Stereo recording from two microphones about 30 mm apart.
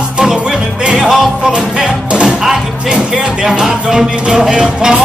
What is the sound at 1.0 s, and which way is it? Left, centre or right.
Music, centre.